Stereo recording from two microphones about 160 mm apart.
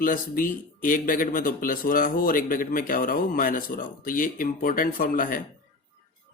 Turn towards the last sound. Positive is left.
turn(degrees=60)  # may be behind; listen again after turning